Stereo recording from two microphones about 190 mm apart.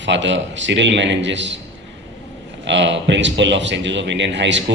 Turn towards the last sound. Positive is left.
turn(degrees=-70)  # may be behind; listen again after turning